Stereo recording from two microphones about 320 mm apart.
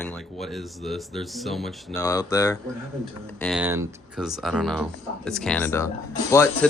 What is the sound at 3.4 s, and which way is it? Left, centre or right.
Speech, centre.